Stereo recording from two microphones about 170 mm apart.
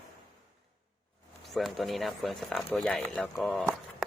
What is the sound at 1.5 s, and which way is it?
Speech, centre (ahead or behind).